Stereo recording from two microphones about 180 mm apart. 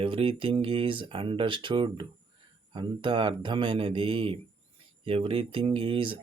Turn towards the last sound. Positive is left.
turn(degrees=-30)  # may be behind; listen again after turning